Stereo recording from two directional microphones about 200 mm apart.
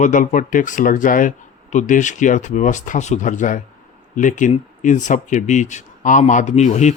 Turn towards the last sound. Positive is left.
turn(degrees=35)  # may be behind; listen again after turning